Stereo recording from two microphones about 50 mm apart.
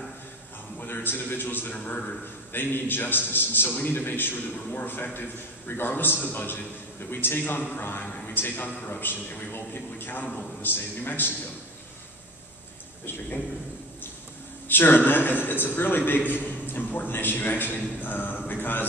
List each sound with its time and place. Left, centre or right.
0.7 s a man's voice: left
1.7 s a man's voice: left
2.5 s a man's voice: left
14.7 s a man's voice: left
18.0 s a sound: left
18.5 s a man's voice: left